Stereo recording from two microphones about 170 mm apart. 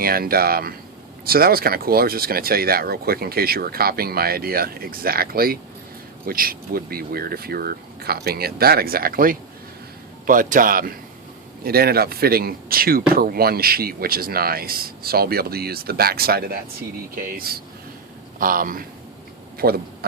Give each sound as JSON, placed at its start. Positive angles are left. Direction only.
{"t": 0.0, "sound": "a man's voice", "side_deg": -60}